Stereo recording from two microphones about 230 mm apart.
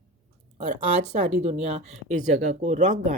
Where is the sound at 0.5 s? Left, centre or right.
Right.